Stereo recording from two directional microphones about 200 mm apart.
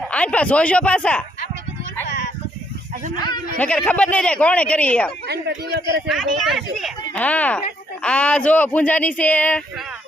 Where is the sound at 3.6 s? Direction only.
5° left (ahead or behind).